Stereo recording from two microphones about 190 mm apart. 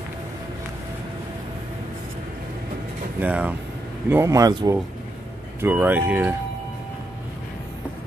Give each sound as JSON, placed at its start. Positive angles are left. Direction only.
{"t": 3.2, "sound": "speech", "side_deg": -10}